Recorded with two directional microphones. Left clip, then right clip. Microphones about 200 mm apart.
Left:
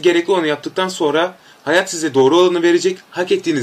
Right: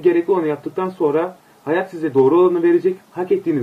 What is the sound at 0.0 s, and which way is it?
Speech, 15° left (ahead or behind).